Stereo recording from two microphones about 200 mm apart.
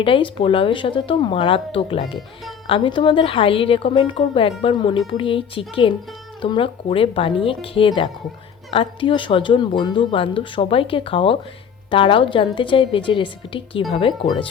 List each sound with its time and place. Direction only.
0.0 s speech: 25° left (ahead or behind)